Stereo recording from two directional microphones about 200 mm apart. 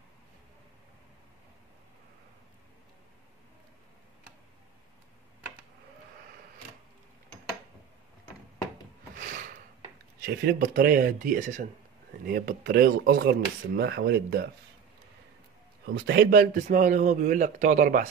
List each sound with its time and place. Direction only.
9.1 s a sound: 45° right (ahead or behind)
10.2 s speech: 45° right (ahead or behind)
15.9 s a man's voice: 55° right (ahead or behind)